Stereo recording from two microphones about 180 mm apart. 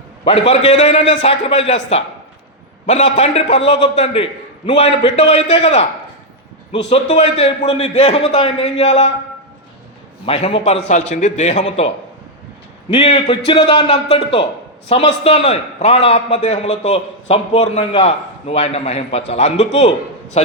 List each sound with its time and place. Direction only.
0.3 s a man's voice: 35° left (ahead or behind)
3.5 s a man's voice: 75° left (ahead or behind)
3.9 s a man's voice: 35° left (ahead or behind)
6.9 s a man's voice: 35° left (ahead or behind)
10.2 s a man's voice: 30° left (ahead or behind)
12.9 s a man's voice: 35° left (ahead or behind)